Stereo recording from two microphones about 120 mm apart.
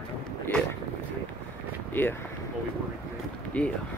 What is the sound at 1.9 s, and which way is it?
Speech, 15° left (ahead or behind).